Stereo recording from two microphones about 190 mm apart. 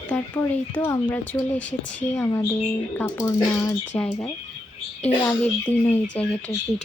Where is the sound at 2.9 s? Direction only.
15° left (ahead or behind).